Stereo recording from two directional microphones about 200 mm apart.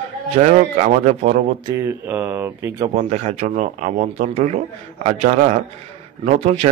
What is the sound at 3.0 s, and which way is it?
Speech, 35° right (ahead or behind).